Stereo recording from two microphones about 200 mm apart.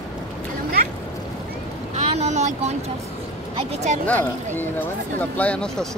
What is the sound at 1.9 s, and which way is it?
Speech, 35° right (ahead or behind).